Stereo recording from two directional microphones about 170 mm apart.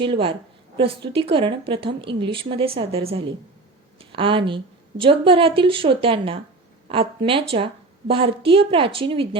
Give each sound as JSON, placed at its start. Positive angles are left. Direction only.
{"t": 0.0, "sound": "a woman's voice", "side_deg": -30}